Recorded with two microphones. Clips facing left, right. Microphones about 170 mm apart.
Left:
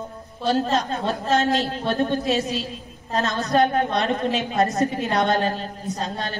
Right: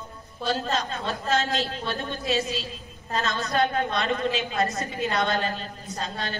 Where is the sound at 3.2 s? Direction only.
40° left (ahead or behind).